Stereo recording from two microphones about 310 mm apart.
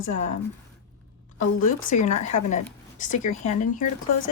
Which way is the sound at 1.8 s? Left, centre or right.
Left.